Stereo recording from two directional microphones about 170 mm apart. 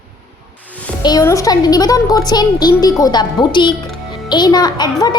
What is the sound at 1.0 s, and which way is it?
A child's voice, 20° left (ahead or behind).